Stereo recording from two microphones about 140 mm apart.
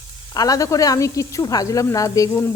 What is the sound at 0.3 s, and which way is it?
Speech, 25° left (ahead or behind).